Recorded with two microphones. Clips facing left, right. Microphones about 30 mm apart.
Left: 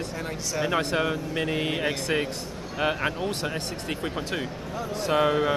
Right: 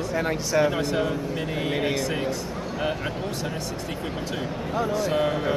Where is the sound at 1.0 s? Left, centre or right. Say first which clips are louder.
Even; left.